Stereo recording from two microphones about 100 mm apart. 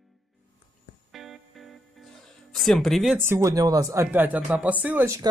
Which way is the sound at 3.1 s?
25° right (ahead or behind).